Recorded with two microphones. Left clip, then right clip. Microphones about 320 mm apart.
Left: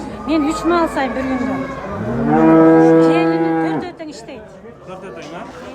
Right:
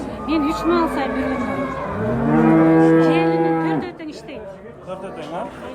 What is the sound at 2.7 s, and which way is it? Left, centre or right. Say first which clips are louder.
Music: left 4 dB; centre.